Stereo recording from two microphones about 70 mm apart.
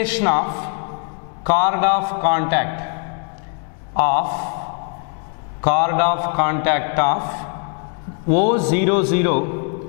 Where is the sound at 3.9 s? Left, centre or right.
Centre.